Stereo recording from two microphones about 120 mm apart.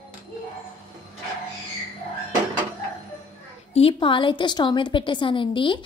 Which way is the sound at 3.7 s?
50° left (ahead or behind).